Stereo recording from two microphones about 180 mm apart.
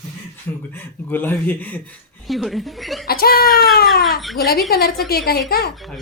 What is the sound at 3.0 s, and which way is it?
Speech, 60° left (ahead or behind).